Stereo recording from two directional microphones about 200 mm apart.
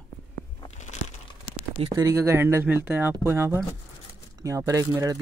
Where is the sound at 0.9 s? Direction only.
35° left (ahead or behind).